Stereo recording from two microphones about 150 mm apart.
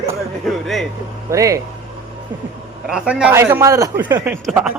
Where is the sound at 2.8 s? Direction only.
5° right (ahead or behind).